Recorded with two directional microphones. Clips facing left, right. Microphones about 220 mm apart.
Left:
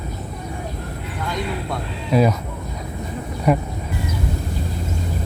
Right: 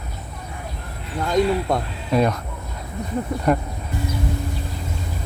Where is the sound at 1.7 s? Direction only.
45° right (ahead or behind).